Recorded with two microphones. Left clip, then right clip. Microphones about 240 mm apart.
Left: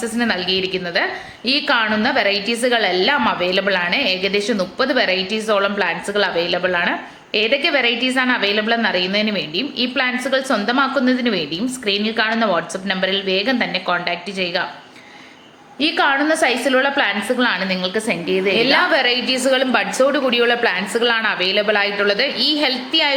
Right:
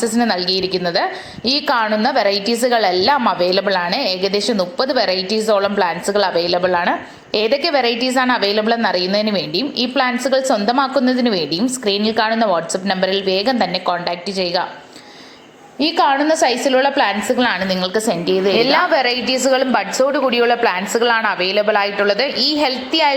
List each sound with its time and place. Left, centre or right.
0.0 s a woman's voice: centre
15.8 s a woman's voice: centre
18.5 s a woman's voice: centre